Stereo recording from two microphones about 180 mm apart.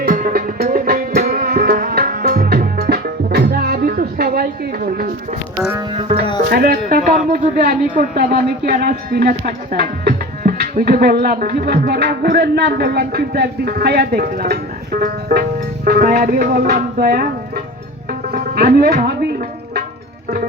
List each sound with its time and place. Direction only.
0.0 s music: 50° right (ahead or behind)
5.9 s music: 30° right (ahead or behind)
6.5 s music: 55° right (ahead or behind)
7.3 s speech: 50° right (ahead or behind)
18.3 s music: 55° right (ahead or behind)